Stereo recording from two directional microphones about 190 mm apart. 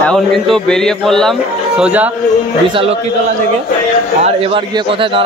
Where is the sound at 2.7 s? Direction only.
30° right (ahead or behind).